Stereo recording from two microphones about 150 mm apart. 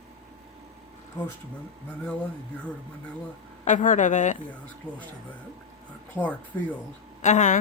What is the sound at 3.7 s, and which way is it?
Speech, 55° left (ahead or behind).